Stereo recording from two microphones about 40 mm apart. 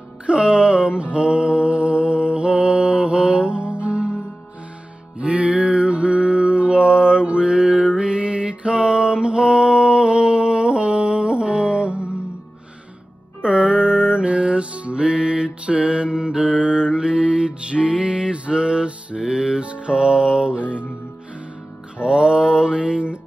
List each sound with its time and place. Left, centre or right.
0.3 s music: right
5.2 s mantra: right
13.4 s music: right
19.2 s music: centre
19.6 s music: right
21.9 s music: right